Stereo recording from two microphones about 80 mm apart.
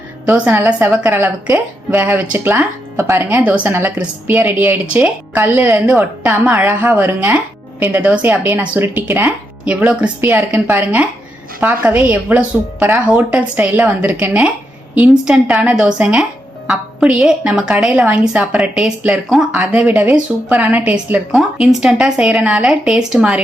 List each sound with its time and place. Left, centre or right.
0.3 s a woman's voice: right
3.2 s a woman's voice: right
3.9 s a woman's voice: centre
10.2 s a woman's voice: right
10.5 s a woman's voice: right
11.9 s a woman's voice: centre
21.3 s a woman's voice: centre